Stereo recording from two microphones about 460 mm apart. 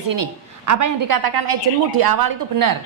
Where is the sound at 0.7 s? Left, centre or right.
Right.